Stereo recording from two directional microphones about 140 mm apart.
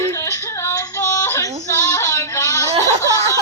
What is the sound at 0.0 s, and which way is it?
Yodeling, 20° left (ahead or behind).